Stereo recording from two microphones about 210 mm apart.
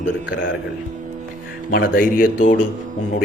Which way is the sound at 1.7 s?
40° left (ahead or behind).